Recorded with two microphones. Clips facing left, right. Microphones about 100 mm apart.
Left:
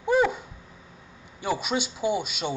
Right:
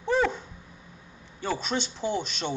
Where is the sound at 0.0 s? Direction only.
10° left (ahead or behind).